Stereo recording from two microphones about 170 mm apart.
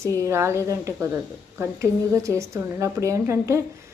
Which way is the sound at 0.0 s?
15° right (ahead or behind).